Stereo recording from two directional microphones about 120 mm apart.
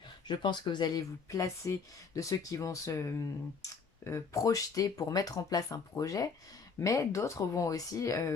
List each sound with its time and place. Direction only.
0.3 s speech: 40° left (ahead or behind)